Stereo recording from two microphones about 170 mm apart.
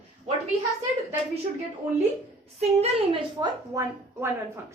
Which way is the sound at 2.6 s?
35° right (ahead or behind).